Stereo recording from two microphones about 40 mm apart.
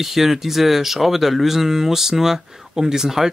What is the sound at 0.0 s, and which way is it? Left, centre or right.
Speech, centre.